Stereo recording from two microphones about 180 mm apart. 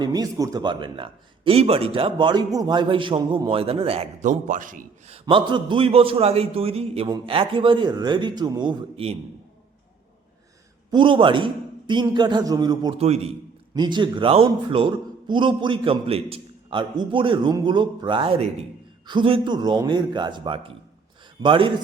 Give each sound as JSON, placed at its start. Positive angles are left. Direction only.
{"t": 0.0, "sound": "speech", "side_deg": -20}
{"t": 5.1, "sound": "a man's voice", "side_deg": -25}
{"t": 10.9, "sound": "speech", "side_deg": -25}
{"t": 13.0, "sound": "a man's voice", "side_deg": -35}
{"t": 13.7, "sound": "speech", "side_deg": -25}